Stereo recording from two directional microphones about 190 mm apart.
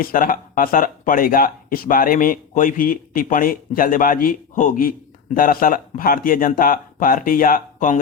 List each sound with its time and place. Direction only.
0.0 s speech: 50° left (ahead or behind)